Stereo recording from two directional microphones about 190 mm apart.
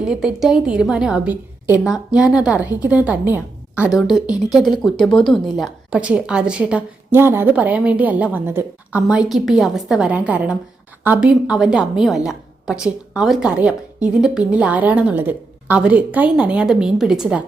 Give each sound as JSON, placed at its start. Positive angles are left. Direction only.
{"t": 0.0, "sound": "a woman's voice", "side_deg": -5}